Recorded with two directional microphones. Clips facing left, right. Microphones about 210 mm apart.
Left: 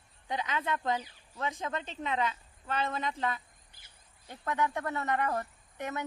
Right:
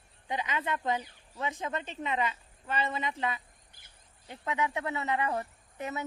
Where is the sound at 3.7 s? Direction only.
55° right (ahead or behind).